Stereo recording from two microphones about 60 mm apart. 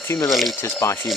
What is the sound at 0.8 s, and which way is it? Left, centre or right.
Speech, left.